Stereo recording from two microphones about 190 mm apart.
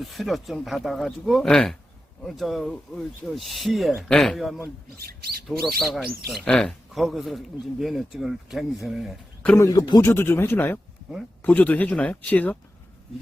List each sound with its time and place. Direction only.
0.0 s speech: centre (ahead or behind)
4.9 s speech: 55° right (ahead or behind)
5.8 s speech: centre (ahead or behind)
9.6 s speech: 20° left (ahead or behind)